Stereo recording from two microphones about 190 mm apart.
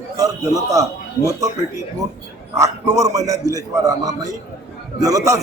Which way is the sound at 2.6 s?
15° right (ahead or behind).